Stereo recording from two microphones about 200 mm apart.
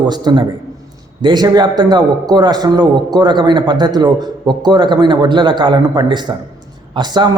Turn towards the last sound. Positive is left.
turn(degrees=-20)  # may be behind; listen again after turning